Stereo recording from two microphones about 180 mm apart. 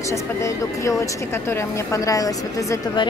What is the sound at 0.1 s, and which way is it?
Speech, 15° left (ahead or behind).